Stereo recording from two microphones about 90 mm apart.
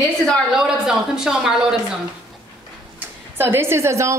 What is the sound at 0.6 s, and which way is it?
Speech, 5° right (ahead or behind).